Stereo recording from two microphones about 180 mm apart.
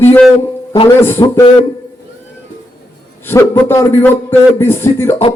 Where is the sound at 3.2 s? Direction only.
10° left (ahead or behind).